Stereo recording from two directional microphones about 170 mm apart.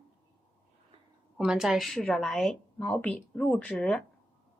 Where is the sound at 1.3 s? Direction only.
5° right (ahead or behind).